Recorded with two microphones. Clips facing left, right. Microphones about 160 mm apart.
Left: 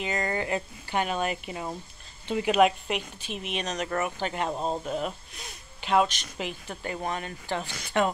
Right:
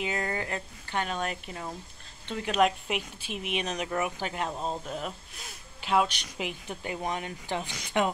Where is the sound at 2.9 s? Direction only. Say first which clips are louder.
Left 1 dB; 5° right (ahead or behind).